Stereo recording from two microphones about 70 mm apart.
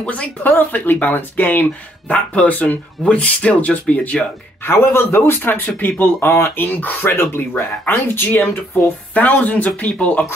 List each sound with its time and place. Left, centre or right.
0.0 s speech: centre
4.6 s speech: left
6.2 s speech: left
9.1 s speech: left